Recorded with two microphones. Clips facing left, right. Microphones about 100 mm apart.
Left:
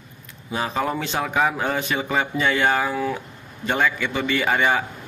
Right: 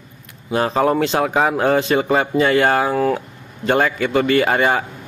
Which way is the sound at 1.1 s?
35° right (ahead or behind).